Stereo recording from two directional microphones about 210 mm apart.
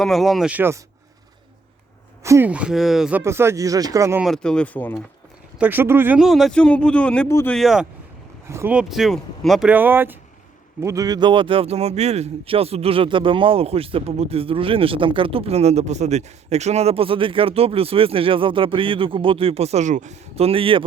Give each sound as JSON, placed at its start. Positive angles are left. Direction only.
{"t": 0.0, "sound": "speech", "side_deg": 0}
{"t": 2.2, "sound": "speech", "side_deg": -10}
{"t": 4.2, "sound": "speech", "side_deg": 0}
{"t": 5.5, "sound": "speech", "side_deg": -10}
{"t": 7.5, "sound": "speech", "side_deg": 0}
{"t": 8.4, "sound": "speech", "side_deg": -10}